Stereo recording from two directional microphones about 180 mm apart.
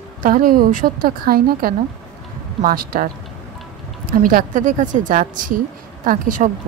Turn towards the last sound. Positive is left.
turn(degrees=-45)  # may be behind; listen again after turning